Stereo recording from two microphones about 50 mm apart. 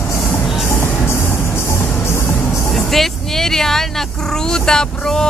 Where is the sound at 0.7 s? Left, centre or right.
Left.